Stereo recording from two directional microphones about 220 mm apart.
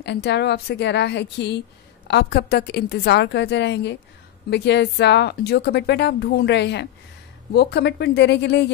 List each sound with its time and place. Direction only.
0.0 s speech: 50° left (ahead or behind)